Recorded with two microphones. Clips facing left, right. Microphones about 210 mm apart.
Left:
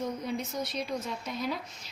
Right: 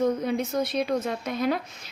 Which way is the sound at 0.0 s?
60° right (ahead or behind).